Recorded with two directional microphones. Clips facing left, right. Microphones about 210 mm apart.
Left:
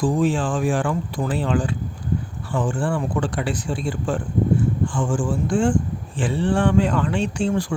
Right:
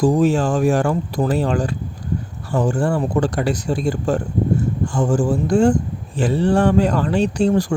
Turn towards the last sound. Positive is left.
turn(degrees=-40)  # may be behind; listen again after turning